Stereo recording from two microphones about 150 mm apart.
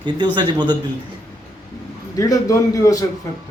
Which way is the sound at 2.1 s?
25° left (ahead or behind).